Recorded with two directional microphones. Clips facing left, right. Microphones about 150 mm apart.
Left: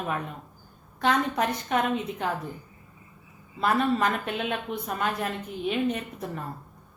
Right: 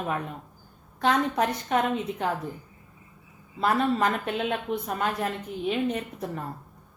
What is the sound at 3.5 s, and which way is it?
A woman's voice, 30° right (ahead or behind).